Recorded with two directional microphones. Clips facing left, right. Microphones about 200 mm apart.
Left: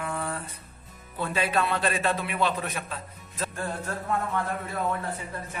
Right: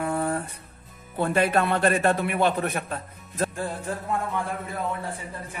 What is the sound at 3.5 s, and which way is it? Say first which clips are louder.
Speech: right 2 dB; 15° right (ahead or behind).